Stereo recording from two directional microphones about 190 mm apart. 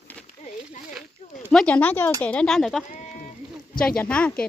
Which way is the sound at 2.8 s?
40° left (ahead or behind).